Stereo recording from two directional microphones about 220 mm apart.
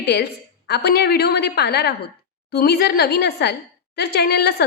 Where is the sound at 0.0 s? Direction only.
45° left (ahead or behind).